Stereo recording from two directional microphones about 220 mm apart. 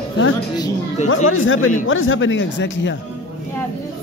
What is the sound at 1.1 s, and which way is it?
Speech, 65° left (ahead or behind).